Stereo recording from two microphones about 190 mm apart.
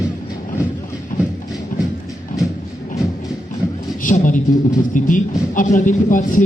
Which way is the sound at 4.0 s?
45° left (ahead or behind).